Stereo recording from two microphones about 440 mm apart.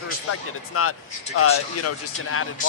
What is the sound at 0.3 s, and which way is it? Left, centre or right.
A man's voice, left.